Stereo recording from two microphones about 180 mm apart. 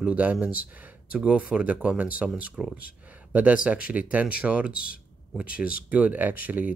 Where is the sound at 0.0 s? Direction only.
10° right (ahead or behind).